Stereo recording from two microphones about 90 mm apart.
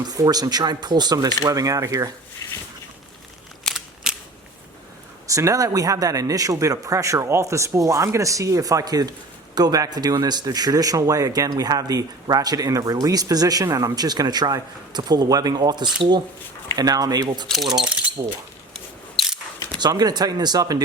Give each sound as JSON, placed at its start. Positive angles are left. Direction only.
{"t": 0.0, "sound": "speech", "side_deg": -45}
{"t": 2.4, "sound": "a sound", "side_deg": 40}
{"t": 3.6, "sound": "scissors", "side_deg": 5}
{"t": 4.1, "sound": "scissors", "side_deg": -10}
{"t": 5.3, "sound": "speech", "side_deg": -35}
{"t": 18.7, "sound": "scissors", "side_deg": 0}
{"t": 19.8, "sound": "speech", "side_deg": -45}